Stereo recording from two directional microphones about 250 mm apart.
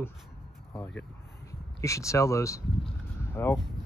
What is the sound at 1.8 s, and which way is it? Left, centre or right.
Speech, centre.